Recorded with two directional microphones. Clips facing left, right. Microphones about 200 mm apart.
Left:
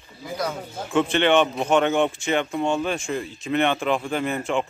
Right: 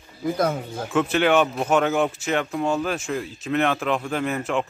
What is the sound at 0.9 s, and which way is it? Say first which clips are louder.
Speech: even; 5° right (ahead or behind).